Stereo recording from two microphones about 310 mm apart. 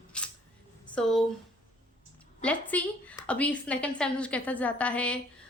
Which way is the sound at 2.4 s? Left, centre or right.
Centre.